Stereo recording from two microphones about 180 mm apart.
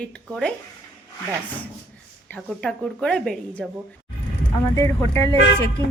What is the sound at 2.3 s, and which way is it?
Speech, 5° left (ahead or behind).